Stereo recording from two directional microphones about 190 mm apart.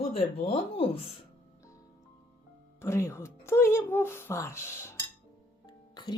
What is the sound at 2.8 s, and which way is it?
Speech, 15° left (ahead or behind).